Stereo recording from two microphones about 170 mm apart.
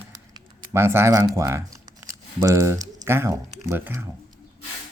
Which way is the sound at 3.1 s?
15° right (ahead or behind).